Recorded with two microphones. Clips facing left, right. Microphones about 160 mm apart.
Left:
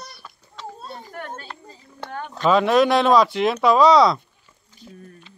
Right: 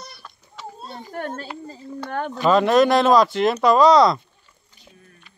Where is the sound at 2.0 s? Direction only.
65° right (ahead or behind).